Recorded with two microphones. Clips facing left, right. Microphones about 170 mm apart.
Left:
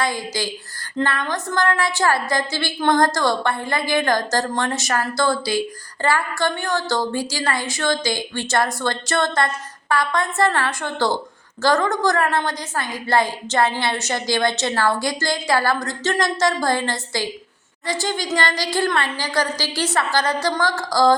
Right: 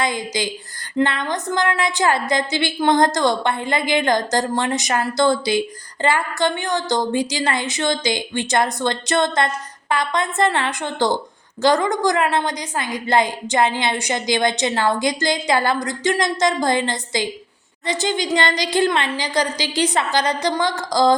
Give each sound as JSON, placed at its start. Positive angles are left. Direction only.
{"t": 0.0, "sound": "a woman's voice", "side_deg": -20}